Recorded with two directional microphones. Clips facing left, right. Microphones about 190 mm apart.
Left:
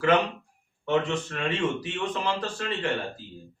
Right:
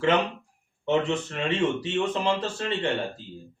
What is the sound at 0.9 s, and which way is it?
A man's voice, 25° right (ahead or behind).